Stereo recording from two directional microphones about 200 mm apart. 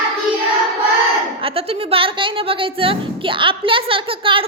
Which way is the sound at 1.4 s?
30° right (ahead or behind).